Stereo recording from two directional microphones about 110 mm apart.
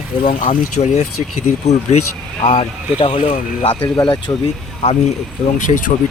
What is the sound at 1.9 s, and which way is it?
Speech, 90° left.